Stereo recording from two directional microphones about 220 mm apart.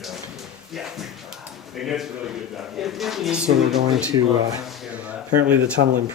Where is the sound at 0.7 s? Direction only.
Centre (ahead or behind).